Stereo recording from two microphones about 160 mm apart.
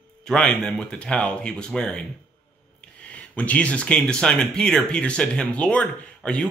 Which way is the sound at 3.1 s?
10° left (ahead or behind).